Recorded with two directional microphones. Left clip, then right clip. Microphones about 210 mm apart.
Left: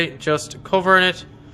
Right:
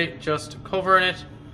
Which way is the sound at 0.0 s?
50° left (ahead or behind).